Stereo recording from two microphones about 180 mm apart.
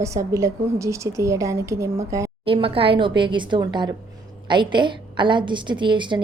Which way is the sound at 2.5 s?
30° right (ahead or behind).